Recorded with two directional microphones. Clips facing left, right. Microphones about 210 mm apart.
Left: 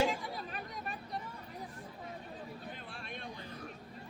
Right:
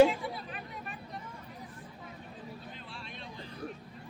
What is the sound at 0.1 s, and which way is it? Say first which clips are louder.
Chatter: right 2 dB; 40° left (ahead or behind).